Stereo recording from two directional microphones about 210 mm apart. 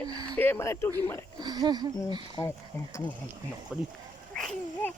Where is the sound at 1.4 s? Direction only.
20° right (ahead or behind).